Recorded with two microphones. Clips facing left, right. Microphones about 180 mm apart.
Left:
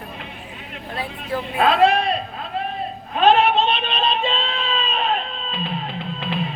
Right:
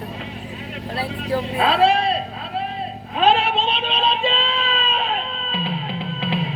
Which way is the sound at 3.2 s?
35° right (ahead or behind).